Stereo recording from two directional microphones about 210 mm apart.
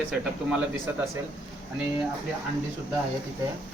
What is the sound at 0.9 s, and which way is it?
Speech, 10° right (ahead or behind).